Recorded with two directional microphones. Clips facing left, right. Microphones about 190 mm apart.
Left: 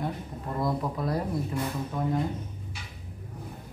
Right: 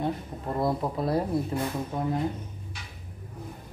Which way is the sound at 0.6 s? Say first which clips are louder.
Right 2 dB; 25° right (ahead or behind).